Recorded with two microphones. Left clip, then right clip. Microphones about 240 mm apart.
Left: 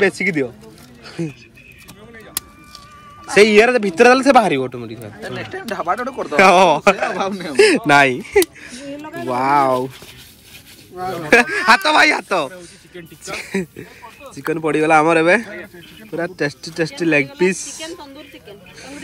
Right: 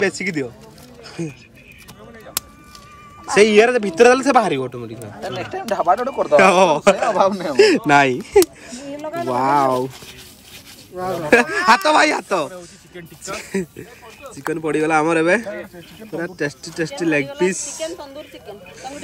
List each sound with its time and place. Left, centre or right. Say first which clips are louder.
0.0 s speech: left 4 dB; centre
1.0 s a sound: left 2 dB; centre
3.3 s speech: left 2 dB; centre
5.2 s speech: right 2 dB; right
6.1 s speech: left 2 dB; centre
11.2 s speech: left 1 dB; centre